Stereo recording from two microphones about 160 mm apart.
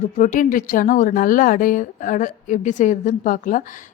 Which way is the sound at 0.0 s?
50° left (ahead or behind).